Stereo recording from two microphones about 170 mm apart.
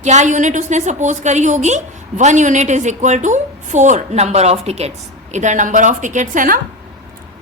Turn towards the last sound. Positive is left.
turn(degrees=-55)  # may be behind; listen again after turning